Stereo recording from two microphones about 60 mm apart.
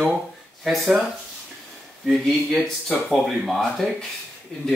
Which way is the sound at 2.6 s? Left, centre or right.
Centre.